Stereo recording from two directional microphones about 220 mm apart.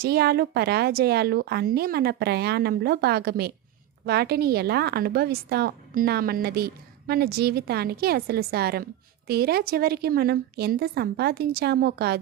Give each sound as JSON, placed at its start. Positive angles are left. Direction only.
{"t": 0.0, "sound": "a woman's voice", "side_deg": -45}